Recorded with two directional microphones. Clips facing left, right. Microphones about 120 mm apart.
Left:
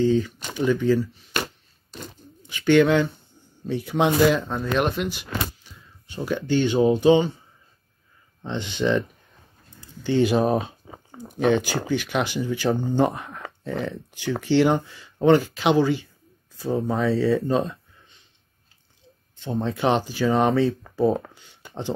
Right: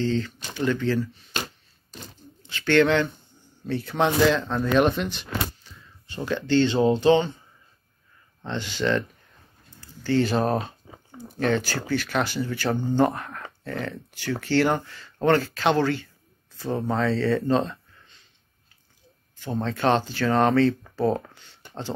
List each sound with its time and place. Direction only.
0.0 s speech: 10° left (ahead or behind)
2.4 s speech: 10° left (ahead or behind)
8.5 s speech: 20° left (ahead or behind)
16.5 s speech: 5° left (ahead or behind)
19.4 s speech: 15° left (ahead or behind)